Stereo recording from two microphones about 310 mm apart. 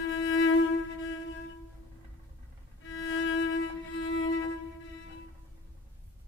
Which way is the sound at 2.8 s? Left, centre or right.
Left.